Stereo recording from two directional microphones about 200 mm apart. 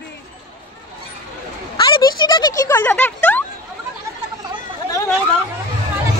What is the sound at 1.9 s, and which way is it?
Speech, 25° left (ahead or behind).